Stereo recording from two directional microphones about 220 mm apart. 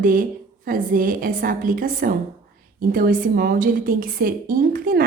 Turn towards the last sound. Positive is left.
turn(degrees=-40)  # may be behind; listen again after turning